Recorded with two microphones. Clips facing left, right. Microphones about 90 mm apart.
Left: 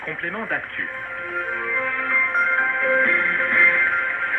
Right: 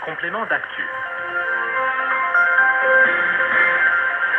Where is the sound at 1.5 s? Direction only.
40° right (ahead or behind).